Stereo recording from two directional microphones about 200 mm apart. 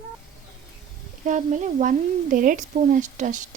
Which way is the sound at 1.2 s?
40° right (ahead or behind).